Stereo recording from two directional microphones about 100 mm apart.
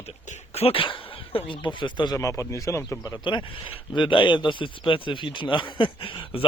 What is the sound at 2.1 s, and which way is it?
A man's voice, 30° left (ahead or behind).